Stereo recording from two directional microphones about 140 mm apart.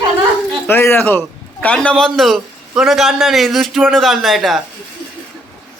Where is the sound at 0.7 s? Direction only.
15° left (ahead or behind); by 4.6 s centre (ahead or behind).